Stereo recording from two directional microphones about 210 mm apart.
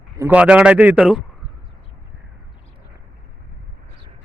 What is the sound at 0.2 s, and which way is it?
Speech, 5° right (ahead or behind).